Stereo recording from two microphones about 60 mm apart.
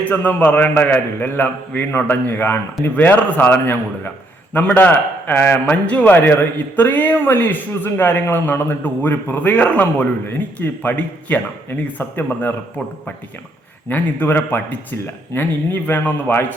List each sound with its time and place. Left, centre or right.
0.0 s a man's voice: left
5.6 s a man's voice: left
11.9 s a man's voice: left
13.9 s a man's voice: left